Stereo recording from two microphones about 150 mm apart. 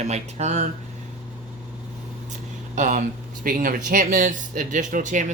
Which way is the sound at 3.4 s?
65° right (ahead or behind).